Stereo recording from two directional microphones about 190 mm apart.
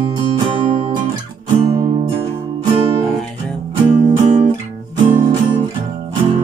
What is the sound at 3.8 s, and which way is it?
Music, 25° right (ahead or behind).